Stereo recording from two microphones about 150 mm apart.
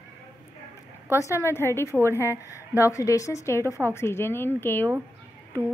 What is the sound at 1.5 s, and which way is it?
Speech, 15° left (ahead or behind).